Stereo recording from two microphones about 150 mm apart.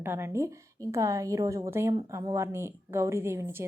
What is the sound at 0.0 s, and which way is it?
A woman's voice, 15° right (ahead or behind).